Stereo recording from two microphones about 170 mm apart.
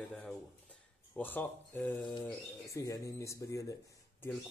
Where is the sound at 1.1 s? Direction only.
10° left (ahead or behind).